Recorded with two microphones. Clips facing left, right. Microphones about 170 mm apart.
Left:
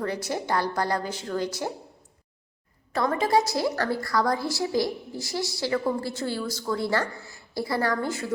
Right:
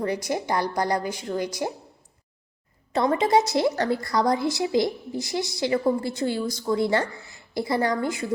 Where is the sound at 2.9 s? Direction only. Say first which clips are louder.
Right 3 dB; 20° right (ahead or behind).